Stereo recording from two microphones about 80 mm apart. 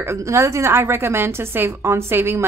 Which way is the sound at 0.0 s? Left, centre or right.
Right.